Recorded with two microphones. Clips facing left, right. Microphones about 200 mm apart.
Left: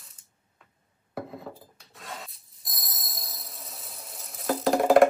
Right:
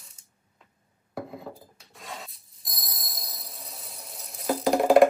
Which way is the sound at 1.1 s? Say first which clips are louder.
Even; centre (ahead or behind).